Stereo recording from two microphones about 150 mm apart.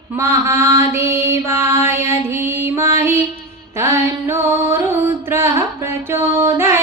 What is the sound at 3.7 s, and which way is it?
Music, 15° right (ahead or behind).